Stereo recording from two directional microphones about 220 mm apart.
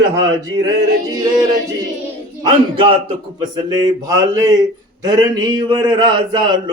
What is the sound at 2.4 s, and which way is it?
A man's voice, 25° right (ahead or behind).